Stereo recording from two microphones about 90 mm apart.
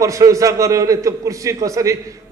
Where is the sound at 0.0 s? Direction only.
35° right (ahead or behind).